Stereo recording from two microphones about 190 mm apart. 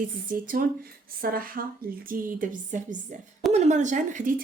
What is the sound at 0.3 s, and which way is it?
A woman's voice, 45° right (ahead or behind).